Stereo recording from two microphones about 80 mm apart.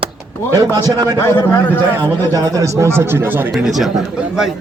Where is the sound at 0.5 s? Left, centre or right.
Right.